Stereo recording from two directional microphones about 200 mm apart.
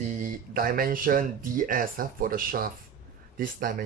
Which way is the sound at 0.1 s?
45° right (ahead or behind).